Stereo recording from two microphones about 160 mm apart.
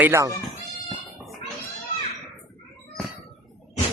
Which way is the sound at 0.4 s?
Centre (ahead or behind).